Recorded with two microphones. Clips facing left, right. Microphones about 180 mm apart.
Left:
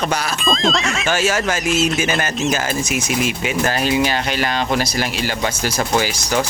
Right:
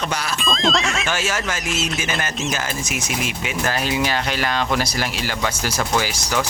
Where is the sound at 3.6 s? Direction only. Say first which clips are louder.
Left 3 dB; 20° left (ahead or behind).